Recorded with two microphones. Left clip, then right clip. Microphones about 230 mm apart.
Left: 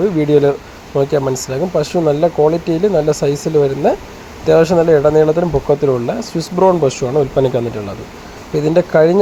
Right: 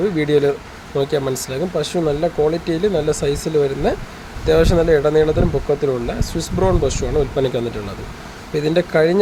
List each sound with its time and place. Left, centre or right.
0.2 s speech: centre